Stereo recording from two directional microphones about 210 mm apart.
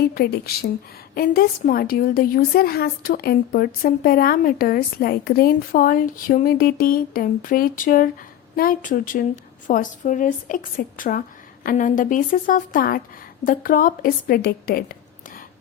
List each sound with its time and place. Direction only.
0.1 s a woman's voice: 45° left (ahead or behind)